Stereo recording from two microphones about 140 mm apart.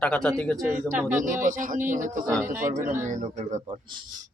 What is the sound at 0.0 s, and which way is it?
Speech, 5° left (ahead or behind).